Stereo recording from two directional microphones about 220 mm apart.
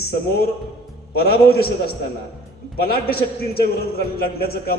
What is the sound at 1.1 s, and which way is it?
Speech, 45° left (ahead or behind).